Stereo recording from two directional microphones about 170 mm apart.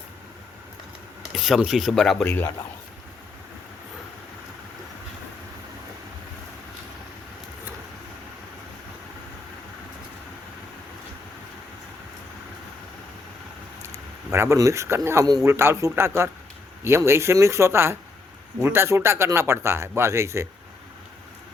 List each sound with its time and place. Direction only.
1.3 s speech: centre (ahead or behind)
13.8 s speech: 15° right (ahead or behind)